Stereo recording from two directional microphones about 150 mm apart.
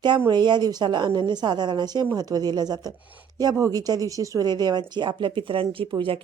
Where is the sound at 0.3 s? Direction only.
30° right (ahead or behind).